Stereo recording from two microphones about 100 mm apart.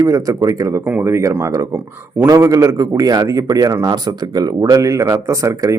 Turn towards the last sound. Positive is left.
turn(degrees=-35)  # may be behind; listen again after turning